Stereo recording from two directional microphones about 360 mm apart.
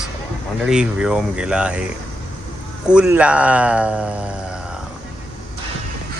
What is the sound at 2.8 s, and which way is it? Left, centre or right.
Speech, centre.